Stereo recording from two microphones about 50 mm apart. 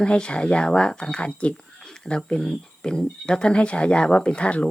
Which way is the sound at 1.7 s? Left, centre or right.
Centre.